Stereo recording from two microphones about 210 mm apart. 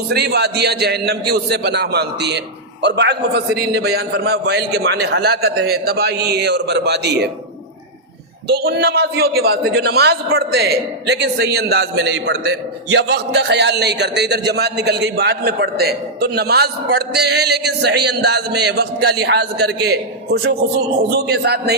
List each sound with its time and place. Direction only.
0.1 s speech: 50° right (ahead or behind)
8.4 s speech: 50° right (ahead or behind)